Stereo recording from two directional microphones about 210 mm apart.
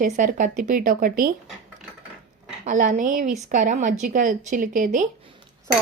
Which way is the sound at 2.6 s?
40° right (ahead or behind).